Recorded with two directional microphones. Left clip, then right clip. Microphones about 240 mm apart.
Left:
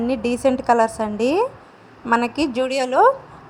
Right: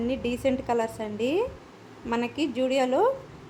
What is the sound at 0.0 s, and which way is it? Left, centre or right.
A woman's voice, left.